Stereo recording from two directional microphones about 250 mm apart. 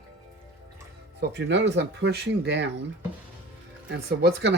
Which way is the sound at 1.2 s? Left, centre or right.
Right.